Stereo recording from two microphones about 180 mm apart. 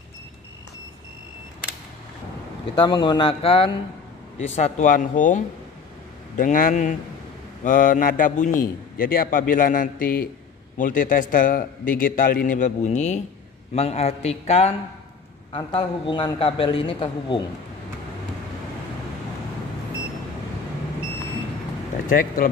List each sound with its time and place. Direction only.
2.7 s a man's voice: 25° left (ahead or behind)
4.6 s a man's voice: 45° left (ahead or behind)
22.1 s a man's voice: 50° left (ahead or behind)